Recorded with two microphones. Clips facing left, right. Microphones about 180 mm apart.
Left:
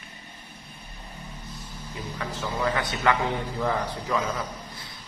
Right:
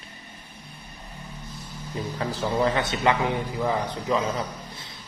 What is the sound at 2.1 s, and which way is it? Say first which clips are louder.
A man's voice: right 6 dB; 30° right (ahead or behind).